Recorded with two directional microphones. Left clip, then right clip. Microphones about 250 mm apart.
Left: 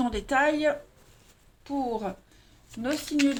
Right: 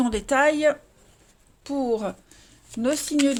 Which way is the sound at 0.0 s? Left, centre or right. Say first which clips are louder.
Right 4 dB; right.